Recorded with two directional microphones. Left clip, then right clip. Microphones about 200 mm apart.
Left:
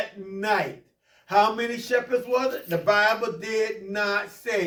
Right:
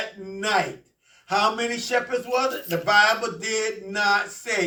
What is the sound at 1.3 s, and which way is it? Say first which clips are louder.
Speech: left 1 dB; 15° left (ahead or behind).